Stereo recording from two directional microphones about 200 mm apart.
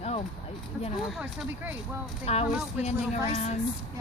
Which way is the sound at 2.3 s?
30° left (ahead or behind).